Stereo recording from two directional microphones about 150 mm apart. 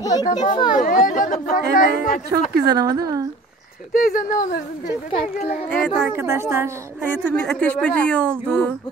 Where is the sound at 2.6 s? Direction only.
25° right (ahead or behind).